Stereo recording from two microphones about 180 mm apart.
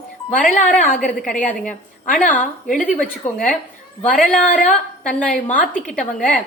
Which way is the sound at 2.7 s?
45° left (ahead or behind).